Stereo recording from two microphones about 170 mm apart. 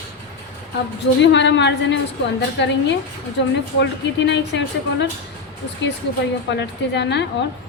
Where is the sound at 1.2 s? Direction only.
90° left.